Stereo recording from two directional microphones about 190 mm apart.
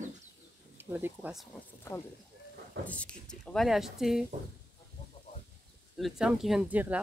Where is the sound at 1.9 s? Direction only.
15° left (ahead or behind); by 4.2 s centre (ahead or behind).